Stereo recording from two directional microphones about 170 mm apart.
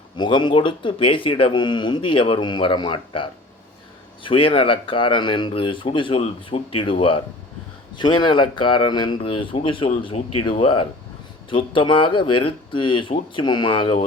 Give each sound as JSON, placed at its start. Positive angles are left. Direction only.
{"t": 0.2, "sound": "speech", "side_deg": 25}